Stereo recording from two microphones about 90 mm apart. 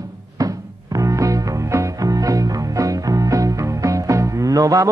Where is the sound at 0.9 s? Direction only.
35° right (ahead or behind).